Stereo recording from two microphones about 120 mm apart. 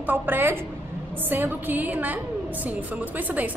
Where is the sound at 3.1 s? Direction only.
15° right (ahead or behind).